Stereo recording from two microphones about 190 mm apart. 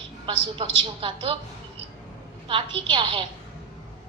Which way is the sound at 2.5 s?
25° right (ahead or behind).